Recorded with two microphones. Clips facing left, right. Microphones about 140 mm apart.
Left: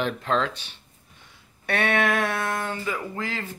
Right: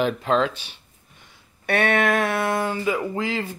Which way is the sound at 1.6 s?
Centre (ahead or behind).